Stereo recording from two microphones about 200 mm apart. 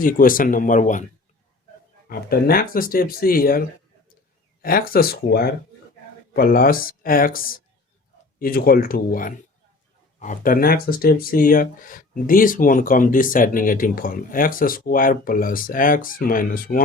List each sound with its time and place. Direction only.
0.0 s speech: 45° left (ahead or behind)
2.0 s speech: 50° left (ahead or behind)
4.6 s speech: 45° left (ahead or behind)